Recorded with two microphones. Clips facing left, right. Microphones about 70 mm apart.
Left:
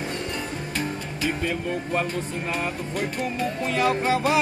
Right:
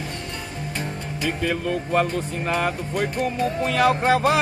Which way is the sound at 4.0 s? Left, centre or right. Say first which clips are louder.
Right 3 dB; right.